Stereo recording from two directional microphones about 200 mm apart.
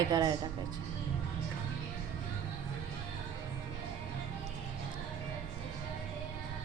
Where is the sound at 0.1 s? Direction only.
20° right (ahead or behind).